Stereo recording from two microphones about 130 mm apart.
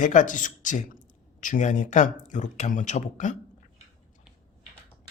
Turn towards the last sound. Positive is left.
turn(degrees=70)  # may be behind; listen again after turning